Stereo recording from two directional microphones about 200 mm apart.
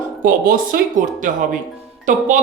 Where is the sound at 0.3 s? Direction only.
45° right (ahead or behind).